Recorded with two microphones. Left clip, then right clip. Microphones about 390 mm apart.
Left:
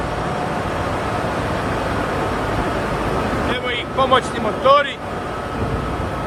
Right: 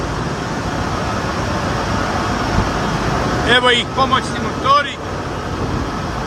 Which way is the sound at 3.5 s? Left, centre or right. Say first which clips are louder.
Right 9 dB; centre.